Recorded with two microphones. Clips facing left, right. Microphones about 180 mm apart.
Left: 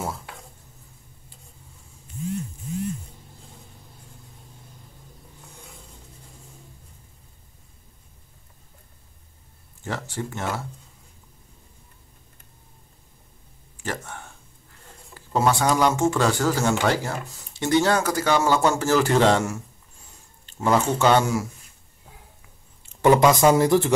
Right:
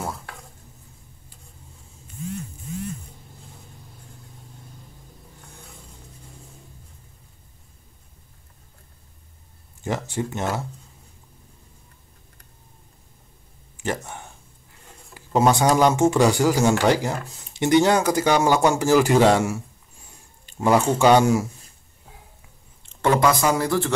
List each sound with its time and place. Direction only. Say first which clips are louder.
9.8 s speech: right 4 dB; 15° right (ahead or behind)
13.8 s speech: right 4 dB; 15° right (ahead or behind)
23.1 s speech: left 3 dB; 25° left (ahead or behind)